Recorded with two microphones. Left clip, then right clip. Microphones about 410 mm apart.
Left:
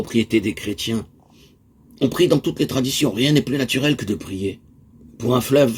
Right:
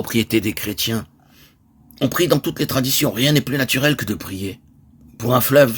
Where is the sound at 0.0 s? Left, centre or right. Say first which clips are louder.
Even; right.